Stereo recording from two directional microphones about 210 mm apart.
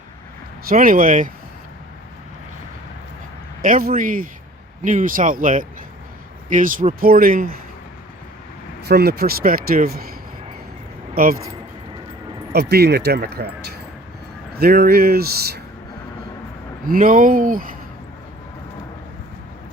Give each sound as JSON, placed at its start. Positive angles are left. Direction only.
{"t": 0.7, "sound": "speech", "side_deg": -40}
{"t": 3.6, "sound": "speech", "side_deg": -40}
{"t": 8.9, "sound": "speech", "side_deg": -50}
{"t": 11.1, "sound": "speech", "side_deg": -45}
{"t": 12.5, "sound": "speech", "side_deg": -50}
{"t": 16.9, "sound": "speech", "side_deg": -40}